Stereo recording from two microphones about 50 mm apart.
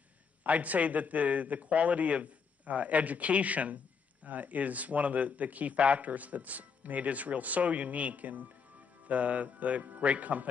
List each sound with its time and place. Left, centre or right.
0.4 s a man's voice: right